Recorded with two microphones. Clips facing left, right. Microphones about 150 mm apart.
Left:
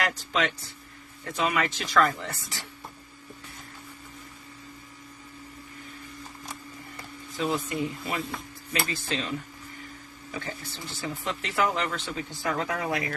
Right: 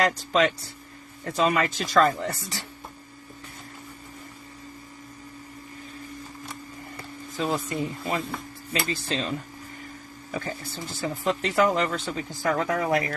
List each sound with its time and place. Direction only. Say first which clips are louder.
0.0 s speech: right 6 dB; 40° right (ahead or behind)
7.3 s speech: right 1 dB; 40° right (ahead or behind)
10.7 s speech: right 4 dB; 45° right (ahead or behind)